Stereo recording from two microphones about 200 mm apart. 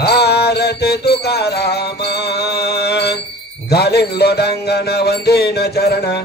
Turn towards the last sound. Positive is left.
turn(degrees=55)  # may be behind; listen again after turning